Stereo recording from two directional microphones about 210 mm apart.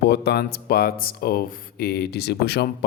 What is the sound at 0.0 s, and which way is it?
Speech, 50° left (ahead or behind).